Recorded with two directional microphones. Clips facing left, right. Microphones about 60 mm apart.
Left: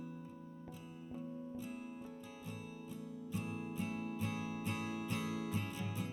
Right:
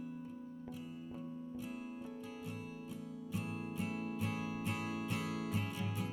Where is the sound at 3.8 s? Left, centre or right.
Right.